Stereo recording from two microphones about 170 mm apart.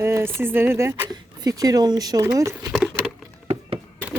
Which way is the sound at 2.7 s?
5° right (ahead or behind).